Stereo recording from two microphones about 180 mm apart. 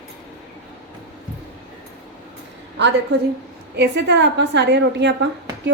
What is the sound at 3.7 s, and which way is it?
A woman's voice, 65° right (ahead or behind).